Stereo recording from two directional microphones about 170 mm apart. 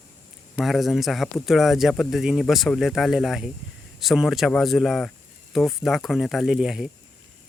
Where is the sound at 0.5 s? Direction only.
Centre (ahead or behind).